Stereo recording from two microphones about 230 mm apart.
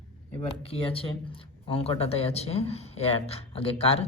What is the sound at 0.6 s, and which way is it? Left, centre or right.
Speech, left.